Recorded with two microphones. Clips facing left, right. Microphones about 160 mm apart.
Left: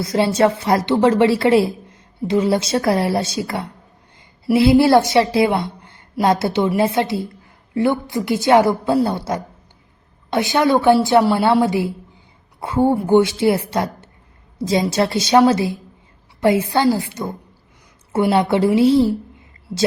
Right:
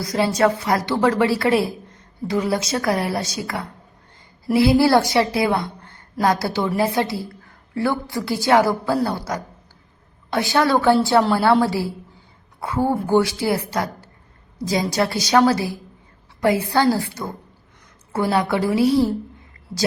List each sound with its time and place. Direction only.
0.0 s a woman's voice: 25° left (ahead or behind)